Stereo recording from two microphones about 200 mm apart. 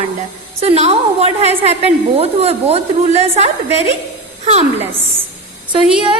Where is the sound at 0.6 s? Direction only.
30° right (ahead or behind).